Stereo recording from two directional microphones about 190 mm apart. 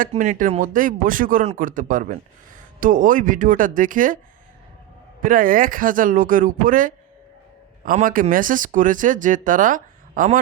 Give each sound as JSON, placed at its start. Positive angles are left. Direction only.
{"t": 0.0, "sound": "speech", "side_deg": -40}
{"t": 5.2, "sound": "speech", "side_deg": -45}